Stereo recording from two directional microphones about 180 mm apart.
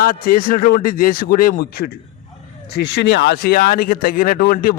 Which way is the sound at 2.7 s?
70° left (ahead or behind).